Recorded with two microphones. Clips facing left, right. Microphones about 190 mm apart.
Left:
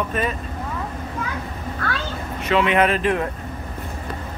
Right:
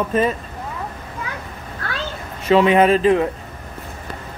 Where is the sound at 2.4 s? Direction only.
30° right (ahead or behind).